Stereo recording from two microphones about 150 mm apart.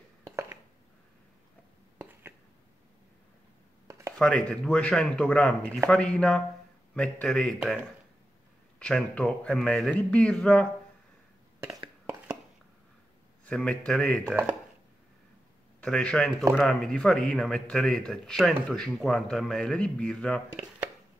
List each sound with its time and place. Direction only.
0.2 s a sound: 15° right (ahead or behind)
4.2 s a man's voice: 5° left (ahead or behind)
13.5 s speech: 5° left (ahead or behind)
15.8 s speech: 5° left (ahead or behind)